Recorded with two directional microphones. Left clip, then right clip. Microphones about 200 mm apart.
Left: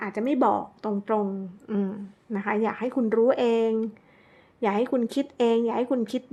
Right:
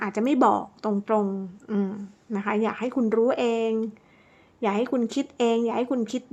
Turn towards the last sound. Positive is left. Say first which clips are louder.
# even
turn(degrees=0)  # may be behind; listen again after turning